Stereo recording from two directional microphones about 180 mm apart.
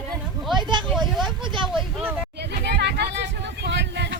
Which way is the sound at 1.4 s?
25° right (ahead or behind).